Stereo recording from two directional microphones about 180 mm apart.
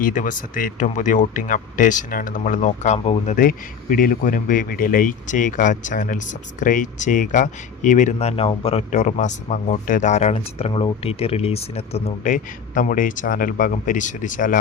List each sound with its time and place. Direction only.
0.0 s speech: 45° left (ahead or behind)
3.3 s speech: 50° left (ahead or behind)